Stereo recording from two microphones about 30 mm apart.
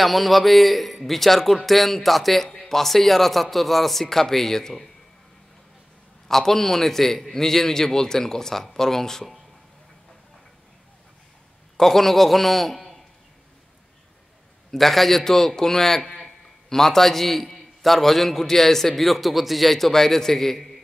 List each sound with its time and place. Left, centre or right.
0.0 s speech: centre
6.2 s a man's voice: centre
11.7 s a man's voice: centre
14.7 s a man's voice: centre